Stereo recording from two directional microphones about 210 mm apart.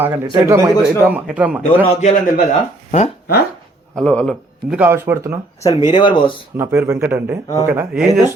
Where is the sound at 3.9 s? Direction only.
5° left (ahead or behind).